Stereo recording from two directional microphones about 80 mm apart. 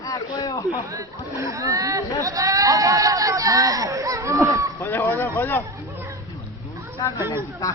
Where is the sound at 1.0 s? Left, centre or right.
Right.